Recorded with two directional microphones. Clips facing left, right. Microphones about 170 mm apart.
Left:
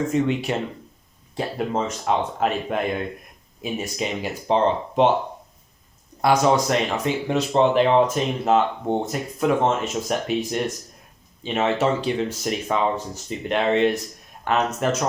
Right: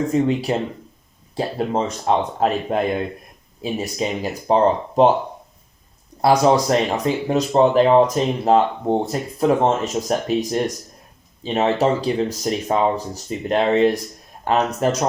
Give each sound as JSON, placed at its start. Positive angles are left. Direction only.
{"t": 0.1, "sound": "speech", "side_deg": -35}
{"t": 6.2, "sound": "speech", "side_deg": -35}